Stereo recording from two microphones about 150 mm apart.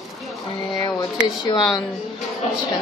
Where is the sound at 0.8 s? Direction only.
25° left (ahead or behind).